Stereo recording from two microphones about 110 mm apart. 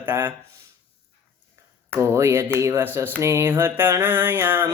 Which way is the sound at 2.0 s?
25° right (ahead or behind).